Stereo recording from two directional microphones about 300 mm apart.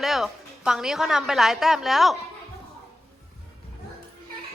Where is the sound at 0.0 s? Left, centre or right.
Centre.